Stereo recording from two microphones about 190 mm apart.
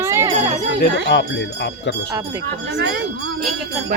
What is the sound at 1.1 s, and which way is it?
Speech, 65° left (ahead or behind).